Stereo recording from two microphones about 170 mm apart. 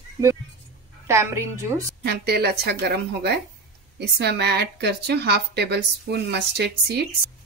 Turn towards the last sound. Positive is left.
turn(degrees=-80)